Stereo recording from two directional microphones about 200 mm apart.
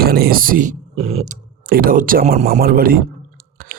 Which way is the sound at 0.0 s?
50° right (ahead or behind).